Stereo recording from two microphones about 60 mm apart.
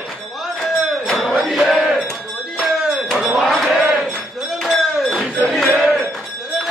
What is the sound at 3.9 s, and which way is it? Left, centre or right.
Music, centre.